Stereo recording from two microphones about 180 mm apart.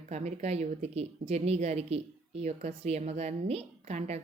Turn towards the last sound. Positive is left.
turn(degrees=-35)  # may be behind; listen again after turning